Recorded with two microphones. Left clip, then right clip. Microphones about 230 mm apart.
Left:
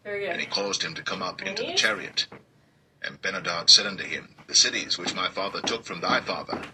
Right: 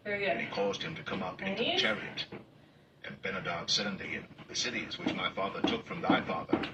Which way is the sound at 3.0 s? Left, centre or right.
Left.